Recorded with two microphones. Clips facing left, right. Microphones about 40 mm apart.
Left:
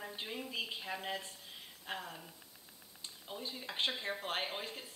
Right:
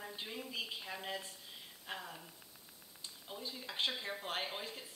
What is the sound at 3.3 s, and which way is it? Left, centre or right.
Speech, left.